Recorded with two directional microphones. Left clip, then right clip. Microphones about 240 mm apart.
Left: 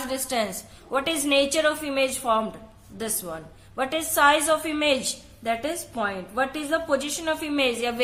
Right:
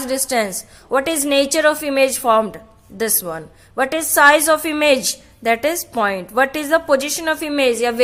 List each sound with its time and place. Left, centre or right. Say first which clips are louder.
0.1 s a woman's voice: right 9 dB; right